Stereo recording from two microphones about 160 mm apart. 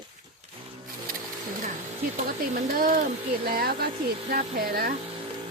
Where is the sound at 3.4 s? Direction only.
70° right (ahead or behind).